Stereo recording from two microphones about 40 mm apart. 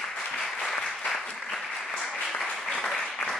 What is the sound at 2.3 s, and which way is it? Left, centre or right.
Applause, centre.